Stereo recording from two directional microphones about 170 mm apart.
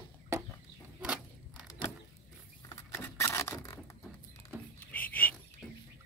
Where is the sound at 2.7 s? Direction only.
15° left (ahead or behind).